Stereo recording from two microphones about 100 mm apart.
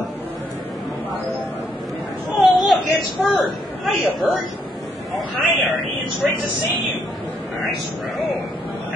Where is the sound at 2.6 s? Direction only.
Centre (ahead or behind).